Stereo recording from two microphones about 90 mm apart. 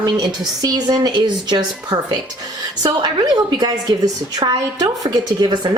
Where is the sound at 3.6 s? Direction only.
50° right (ahead or behind).